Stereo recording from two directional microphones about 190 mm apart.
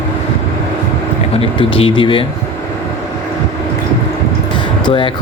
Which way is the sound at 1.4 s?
30° left (ahead or behind).